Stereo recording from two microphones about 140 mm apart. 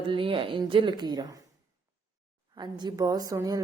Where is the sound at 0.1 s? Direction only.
40° right (ahead or behind).